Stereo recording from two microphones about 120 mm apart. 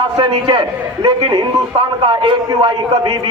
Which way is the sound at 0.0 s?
45° right (ahead or behind).